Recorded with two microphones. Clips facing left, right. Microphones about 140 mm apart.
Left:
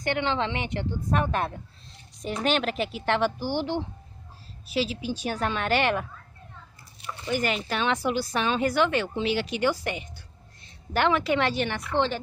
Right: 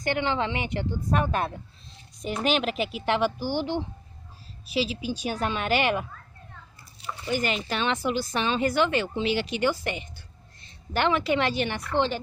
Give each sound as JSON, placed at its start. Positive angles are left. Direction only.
{"t": 0.1, "sound": "a woman's voice", "side_deg": -10}
{"t": 3.3, "sound": "a woman's voice", "side_deg": 25}
{"t": 5.0, "sound": "a woman's voice", "side_deg": -15}
{"t": 7.4, "sound": "a woman's voice", "side_deg": 0}